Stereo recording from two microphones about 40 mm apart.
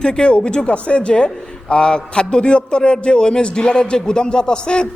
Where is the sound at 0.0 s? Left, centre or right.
Left.